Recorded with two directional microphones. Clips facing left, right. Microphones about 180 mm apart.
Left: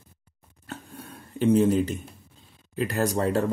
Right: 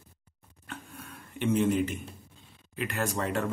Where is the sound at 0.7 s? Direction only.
35° left (ahead or behind).